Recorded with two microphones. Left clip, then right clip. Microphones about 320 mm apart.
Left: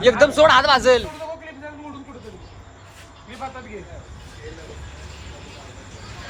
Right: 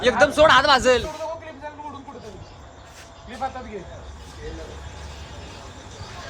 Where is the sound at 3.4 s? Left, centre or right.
Right.